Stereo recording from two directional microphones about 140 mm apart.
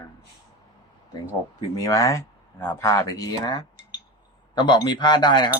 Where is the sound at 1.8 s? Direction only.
25° left (ahead or behind).